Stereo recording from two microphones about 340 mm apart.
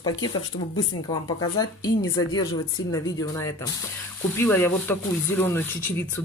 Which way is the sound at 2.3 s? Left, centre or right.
Centre.